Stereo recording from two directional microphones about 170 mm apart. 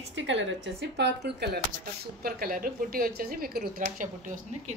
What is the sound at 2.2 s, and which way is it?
A woman's voice, 60° right (ahead or behind).